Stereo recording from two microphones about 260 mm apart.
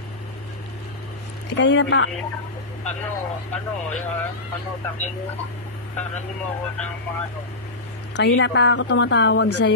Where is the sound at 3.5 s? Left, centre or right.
Centre.